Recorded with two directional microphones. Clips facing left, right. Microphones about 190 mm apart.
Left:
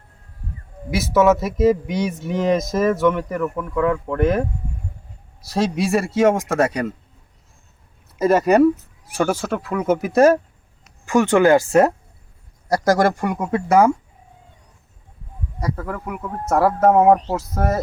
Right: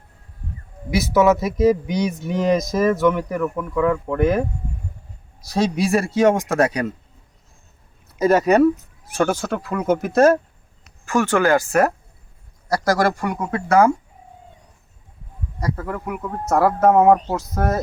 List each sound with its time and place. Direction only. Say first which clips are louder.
0.9 s speech: even; centre (ahead or behind)
5.5 s speech: right 1 dB; centre (ahead or behind)
8.2 s speech: even; centre (ahead or behind); by 13.9 s 20° left (ahead or behind)
15.6 s speech: right 1 dB; 5° left (ahead or behind)